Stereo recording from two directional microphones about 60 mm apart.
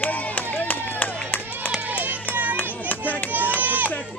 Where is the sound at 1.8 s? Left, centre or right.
Right.